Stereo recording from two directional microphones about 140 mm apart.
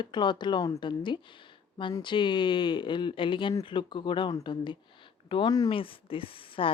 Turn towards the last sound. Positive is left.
turn(degrees=40)  # may be behind; listen again after turning